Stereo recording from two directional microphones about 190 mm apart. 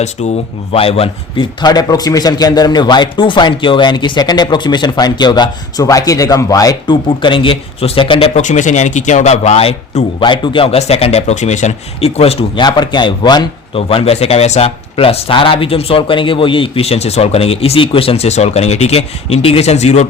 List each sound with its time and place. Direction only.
0.2 s a man's voice: 35° left (ahead or behind)
8.4 s speech: 40° left (ahead or behind)